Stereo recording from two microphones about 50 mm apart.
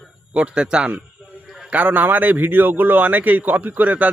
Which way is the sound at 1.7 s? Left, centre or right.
Right.